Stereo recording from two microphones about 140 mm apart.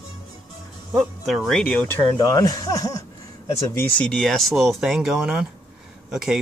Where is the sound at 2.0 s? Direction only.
30° left (ahead or behind).